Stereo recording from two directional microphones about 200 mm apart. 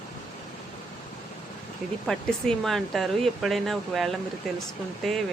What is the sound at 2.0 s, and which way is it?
Speech, centre (ahead or behind).